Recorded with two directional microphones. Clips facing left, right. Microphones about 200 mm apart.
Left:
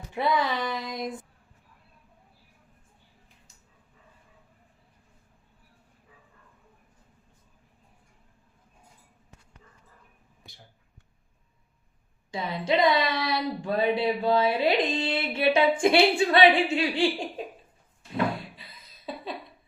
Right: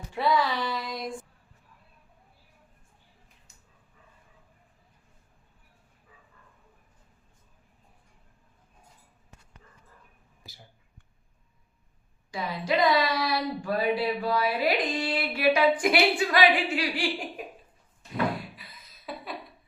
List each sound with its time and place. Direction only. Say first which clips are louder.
0.1 s child singing: even; 20° left (ahead or behind)
10.4 s a sound: right 1 dB; centre (ahead or behind)
12.3 s speech: left 2 dB; 25° left (ahead or behind)